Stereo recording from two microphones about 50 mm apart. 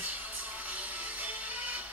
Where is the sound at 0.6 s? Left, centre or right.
Right.